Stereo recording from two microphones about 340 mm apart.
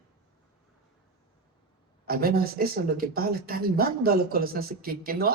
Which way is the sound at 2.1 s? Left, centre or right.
Right.